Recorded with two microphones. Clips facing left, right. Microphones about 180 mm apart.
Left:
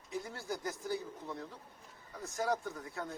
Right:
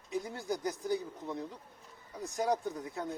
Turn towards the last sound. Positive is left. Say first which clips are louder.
# right 4 dB
turn(degrees=-20)  # may be behind; listen again after turning